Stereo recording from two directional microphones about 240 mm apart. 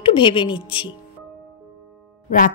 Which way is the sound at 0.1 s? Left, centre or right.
Centre.